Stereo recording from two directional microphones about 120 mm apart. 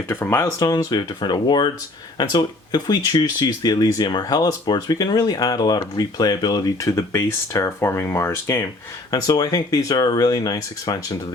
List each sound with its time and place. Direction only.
0.1 s speech: 20° left (ahead or behind)
0.6 s speech: 30° left (ahead or behind)